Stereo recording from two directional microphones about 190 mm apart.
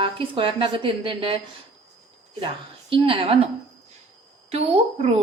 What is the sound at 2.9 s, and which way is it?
Speech, 30° right (ahead or behind).